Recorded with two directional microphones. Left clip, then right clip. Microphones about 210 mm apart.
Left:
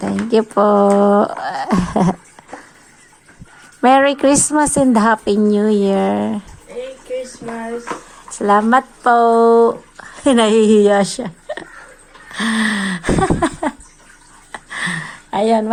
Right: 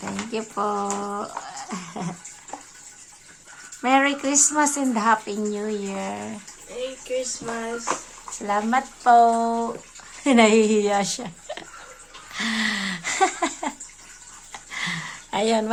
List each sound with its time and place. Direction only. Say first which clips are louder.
0.3 s a woman's voice: left 14 dB; 30° left (ahead or behind)
3.8 s a woman's voice: left 9 dB; 35° left (ahead or behind)
8.4 s speech: left 10 dB; 30° left (ahead or behind); by 11.6 s 15° left (ahead or behind)
12.3 s wheeze: left 6 dB; 20° left (ahead or behind)
14.5 s a sound: left 7 dB; 15° left (ahead or behind); by 15.7 s centre (ahead or behind)